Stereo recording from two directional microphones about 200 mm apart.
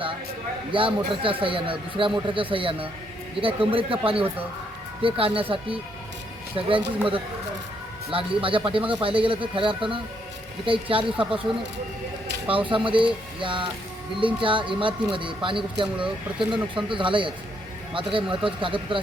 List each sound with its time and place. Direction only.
0.7 s speech: 25° right (ahead or behind)
12.5 s speech: 25° right (ahead or behind)
16.0 s speech: centre (ahead or behind)
16.7 s speech: 25° right (ahead or behind)